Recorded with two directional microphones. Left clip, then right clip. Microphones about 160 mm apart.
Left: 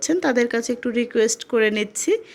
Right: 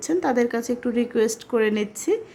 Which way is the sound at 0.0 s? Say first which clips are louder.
Left 2 dB; 15° left (ahead or behind).